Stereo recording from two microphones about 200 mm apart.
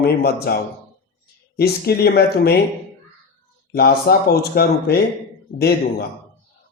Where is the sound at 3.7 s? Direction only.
50° left (ahead or behind).